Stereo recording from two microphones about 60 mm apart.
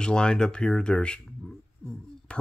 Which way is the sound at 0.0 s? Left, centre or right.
Centre.